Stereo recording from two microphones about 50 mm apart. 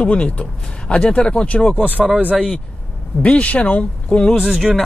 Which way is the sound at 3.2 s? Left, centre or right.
Left.